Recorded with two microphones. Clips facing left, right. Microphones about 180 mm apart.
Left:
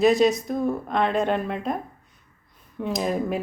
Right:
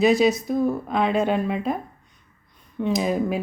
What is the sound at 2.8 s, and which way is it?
Speech, centre (ahead or behind).